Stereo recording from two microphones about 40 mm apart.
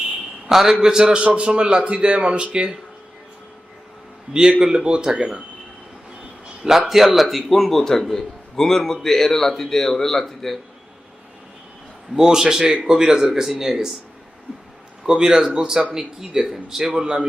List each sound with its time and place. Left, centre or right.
0.4 s a man's voice: centre; by 2.7 s right
4.4 s a man's voice: right
6.6 s a man's voice: centre
12.1 s speech: centre
15.0 s speech: centre